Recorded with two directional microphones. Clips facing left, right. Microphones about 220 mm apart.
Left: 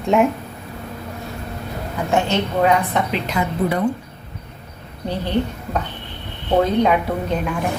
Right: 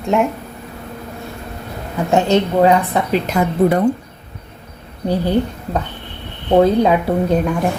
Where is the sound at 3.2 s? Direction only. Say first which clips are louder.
Right 6 dB; 45° right (ahead or behind).